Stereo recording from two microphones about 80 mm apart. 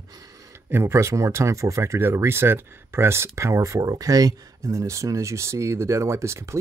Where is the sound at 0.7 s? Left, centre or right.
Right.